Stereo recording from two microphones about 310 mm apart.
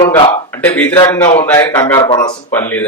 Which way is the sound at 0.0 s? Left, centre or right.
Centre.